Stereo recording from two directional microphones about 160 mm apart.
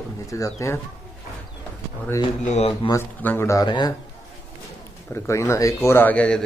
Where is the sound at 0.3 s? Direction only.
20° left (ahead or behind).